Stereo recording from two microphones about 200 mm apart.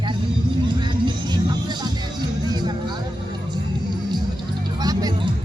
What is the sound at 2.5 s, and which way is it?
Music, 20° right (ahead or behind).